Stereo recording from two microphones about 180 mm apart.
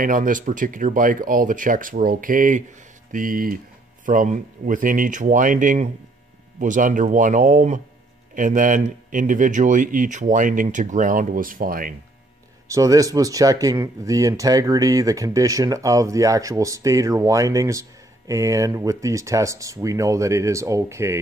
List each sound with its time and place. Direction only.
0.0 s speech: 45° right (ahead or behind)
12.6 s speech: 20° right (ahead or behind)